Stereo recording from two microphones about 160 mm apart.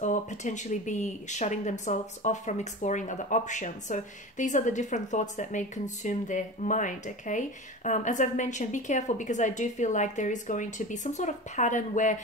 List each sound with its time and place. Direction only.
0.0 s speech: 50° left (ahead or behind)